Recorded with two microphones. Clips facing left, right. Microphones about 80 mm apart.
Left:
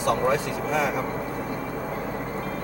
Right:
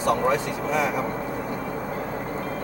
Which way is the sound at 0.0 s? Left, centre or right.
Right.